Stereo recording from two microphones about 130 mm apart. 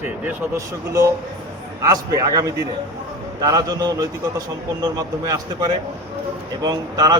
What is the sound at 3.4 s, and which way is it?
A man's voice, 30° right (ahead or behind).